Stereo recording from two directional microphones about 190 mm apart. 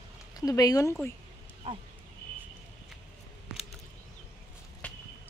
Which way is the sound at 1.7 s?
35° right (ahead or behind).